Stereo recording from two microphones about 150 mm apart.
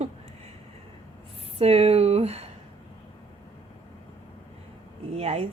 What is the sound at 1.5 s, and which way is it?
Speech, 45° right (ahead or behind).